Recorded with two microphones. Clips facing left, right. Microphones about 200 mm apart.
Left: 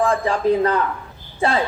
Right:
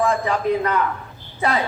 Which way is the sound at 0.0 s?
30° left (ahead or behind).